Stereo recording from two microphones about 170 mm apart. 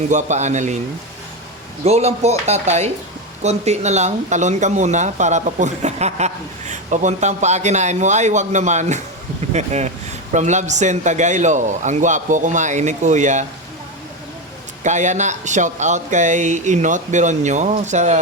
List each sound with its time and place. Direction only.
0.1 s speech: 45° right (ahead or behind)
1.8 s speech: 40° right (ahead or behind)
14.8 s speech: 45° right (ahead or behind)